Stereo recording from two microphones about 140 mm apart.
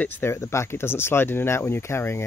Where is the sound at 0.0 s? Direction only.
15° left (ahead or behind).